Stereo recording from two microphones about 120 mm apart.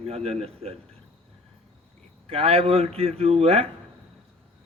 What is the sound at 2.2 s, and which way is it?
A man's voice, 55° right (ahead or behind).